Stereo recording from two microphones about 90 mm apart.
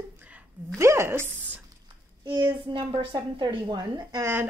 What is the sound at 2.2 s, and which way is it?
A child's voice, 55° right (ahead or behind).